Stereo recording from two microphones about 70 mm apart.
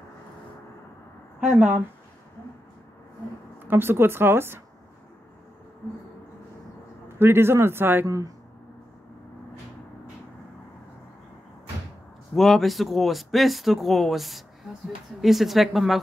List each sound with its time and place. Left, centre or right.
1.4 s speech: centre
3.6 s speech: right
7.2 s speech: right
12.4 s speech: centre